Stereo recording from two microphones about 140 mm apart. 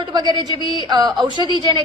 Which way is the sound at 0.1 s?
30° right (ahead or behind).